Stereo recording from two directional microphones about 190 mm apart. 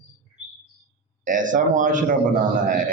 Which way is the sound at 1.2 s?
45° right (ahead or behind).